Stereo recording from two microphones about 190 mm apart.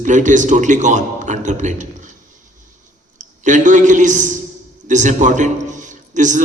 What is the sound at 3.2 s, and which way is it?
A man's voice, 40° right (ahead or behind).